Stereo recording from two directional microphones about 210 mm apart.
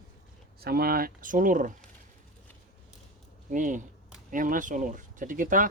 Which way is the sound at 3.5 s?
40° right (ahead or behind).